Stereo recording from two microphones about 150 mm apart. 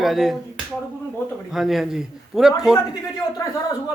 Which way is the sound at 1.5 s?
Centre (ahead or behind).